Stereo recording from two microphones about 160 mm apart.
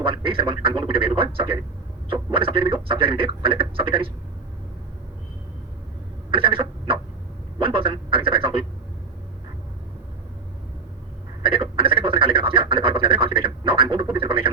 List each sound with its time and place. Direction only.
0.0 s a man's voice: 35° right (ahead or behind)
6.3 s a sound: 35° right (ahead or behind)
11.4 s frog: 35° right (ahead or behind)
13.8 s speech: 30° right (ahead or behind)